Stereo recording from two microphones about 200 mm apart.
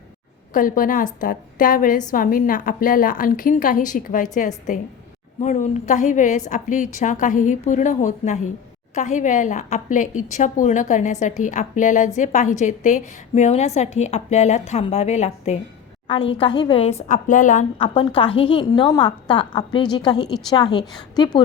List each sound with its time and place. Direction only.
0.5 s a woman's voice: 45° left (ahead or behind)
18.1 s a woman's voice: 25° left (ahead or behind)